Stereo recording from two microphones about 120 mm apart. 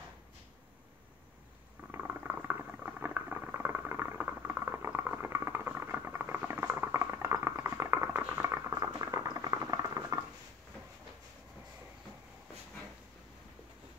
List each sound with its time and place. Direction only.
1.9 s boiling: 15° right (ahead or behind)